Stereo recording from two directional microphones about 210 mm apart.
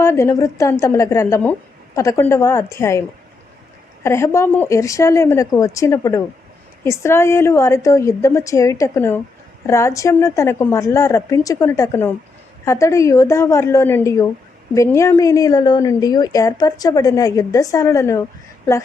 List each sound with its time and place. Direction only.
0.0 s a woman's voice: 15° left (ahead or behind)
4.0 s a woman's voice: 15° left (ahead or behind)